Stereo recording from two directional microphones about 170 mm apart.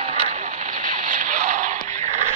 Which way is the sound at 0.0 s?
35° right (ahead or behind).